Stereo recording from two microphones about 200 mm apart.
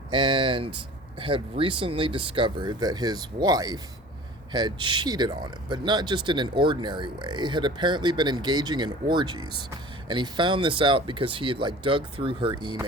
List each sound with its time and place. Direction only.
0.1 s speech: 25° right (ahead or behind)